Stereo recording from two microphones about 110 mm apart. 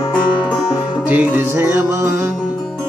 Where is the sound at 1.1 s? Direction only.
15° right (ahead or behind).